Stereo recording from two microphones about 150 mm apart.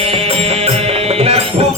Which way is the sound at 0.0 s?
40° right (ahead or behind).